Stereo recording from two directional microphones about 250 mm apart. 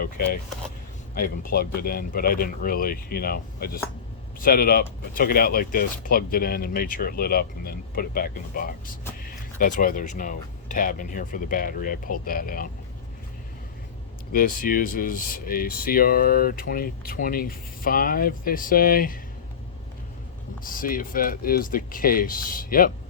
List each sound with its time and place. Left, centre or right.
1.5 s speech: left
14.3 s speech: left
20.7 s speech: left